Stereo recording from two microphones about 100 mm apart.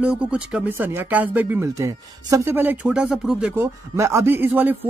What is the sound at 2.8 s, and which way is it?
Speech, 10° right (ahead or behind).